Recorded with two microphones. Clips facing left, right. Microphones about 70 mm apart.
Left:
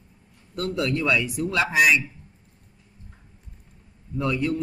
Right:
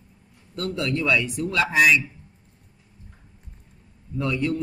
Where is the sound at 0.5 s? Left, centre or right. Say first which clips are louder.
Left 1 dB; centre.